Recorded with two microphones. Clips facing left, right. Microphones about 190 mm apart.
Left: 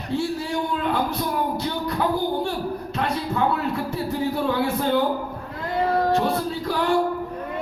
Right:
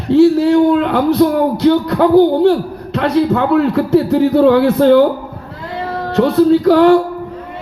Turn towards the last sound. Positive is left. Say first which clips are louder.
# right 16 dB
turn(degrees=-80)